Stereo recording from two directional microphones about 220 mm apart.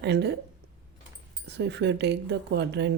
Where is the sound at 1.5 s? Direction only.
50° right (ahead or behind).